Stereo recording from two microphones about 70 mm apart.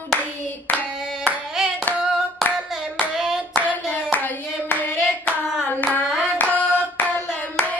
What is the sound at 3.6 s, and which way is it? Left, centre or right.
Hands, left.